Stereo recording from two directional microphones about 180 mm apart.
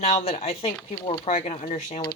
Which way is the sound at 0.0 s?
35° left (ahead or behind).